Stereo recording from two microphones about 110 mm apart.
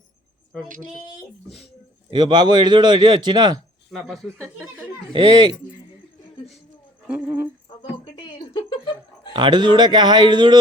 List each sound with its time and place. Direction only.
2.0 s a man's voice: 40° right (ahead or behind)
3.9 s speech: centre (ahead or behind)
5.1 s speech: 40° right (ahead or behind)
7.1 s speech: 15° right (ahead or behind)
8.5 s laughter: 45° left (ahead or behind)
9.3 s a man's voice: 40° right (ahead or behind)